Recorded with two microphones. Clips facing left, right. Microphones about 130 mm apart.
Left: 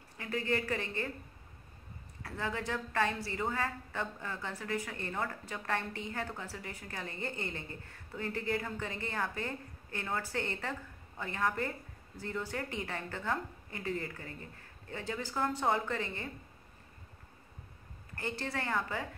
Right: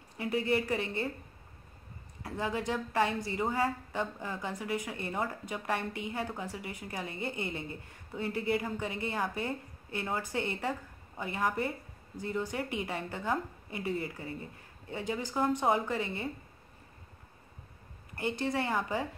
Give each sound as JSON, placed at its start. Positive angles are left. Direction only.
{"t": 0.2, "sound": "a woman's voice", "side_deg": -15}
{"t": 2.2, "sound": "a woman's voice", "side_deg": -20}
{"t": 18.1, "sound": "a woman's voice", "side_deg": -15}